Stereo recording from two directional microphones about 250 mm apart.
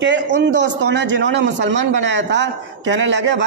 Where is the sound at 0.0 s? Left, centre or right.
Right.